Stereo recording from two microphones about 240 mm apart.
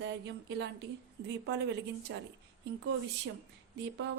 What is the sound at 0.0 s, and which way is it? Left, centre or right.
Speech, right.